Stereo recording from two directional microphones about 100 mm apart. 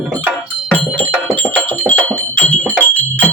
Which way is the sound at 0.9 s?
20° left (ahead or behind).